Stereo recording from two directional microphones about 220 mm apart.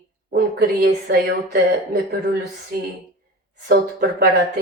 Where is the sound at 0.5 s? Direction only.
45° right (ahead or behind).